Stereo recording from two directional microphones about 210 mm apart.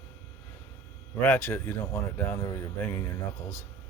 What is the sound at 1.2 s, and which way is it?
Speech, 10° left (ahead or behind).